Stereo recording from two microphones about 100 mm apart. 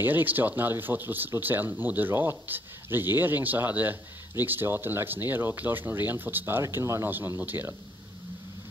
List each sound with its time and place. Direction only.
0.0 s speech: 20° right (ahead or behind)